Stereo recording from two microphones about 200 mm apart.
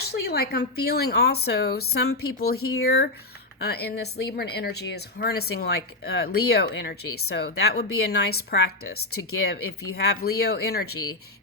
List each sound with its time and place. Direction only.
0.1 s speech: 50° left (ahead or behind)